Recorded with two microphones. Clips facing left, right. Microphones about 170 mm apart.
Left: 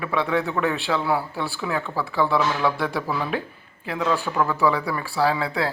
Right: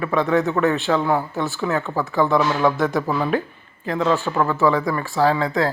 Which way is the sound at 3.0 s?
45° right (ahead or behind).